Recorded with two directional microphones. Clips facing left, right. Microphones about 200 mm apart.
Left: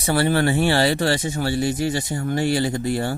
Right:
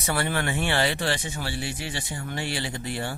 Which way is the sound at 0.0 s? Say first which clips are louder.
Left 8 dB; 30° left (ahead or behind).